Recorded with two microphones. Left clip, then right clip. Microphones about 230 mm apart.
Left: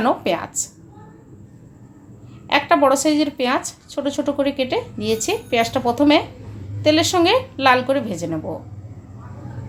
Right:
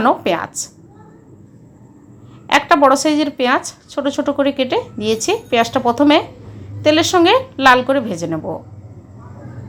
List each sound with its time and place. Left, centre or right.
0.0 s a woman's voice: centre
2.5 s a woman's voice: centre